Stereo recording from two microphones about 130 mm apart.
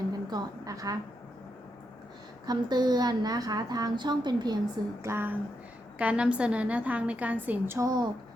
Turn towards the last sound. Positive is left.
turn(degrees=-20)  # may be behind; listen again after turning